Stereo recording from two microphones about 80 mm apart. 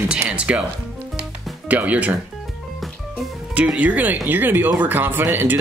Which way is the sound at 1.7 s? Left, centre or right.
Centre.